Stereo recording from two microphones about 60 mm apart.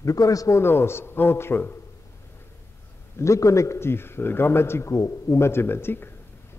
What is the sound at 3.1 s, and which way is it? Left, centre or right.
A man's voice, left.